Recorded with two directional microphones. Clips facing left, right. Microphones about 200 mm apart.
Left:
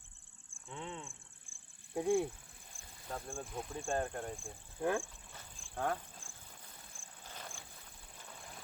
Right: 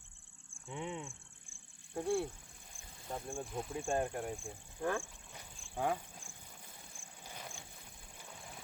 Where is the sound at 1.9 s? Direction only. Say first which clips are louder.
Left 3 dB; 10° left (ahead or behind).